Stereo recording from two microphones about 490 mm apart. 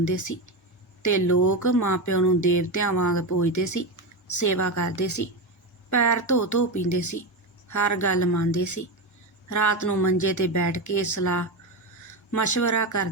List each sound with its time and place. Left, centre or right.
0.0 s speech: left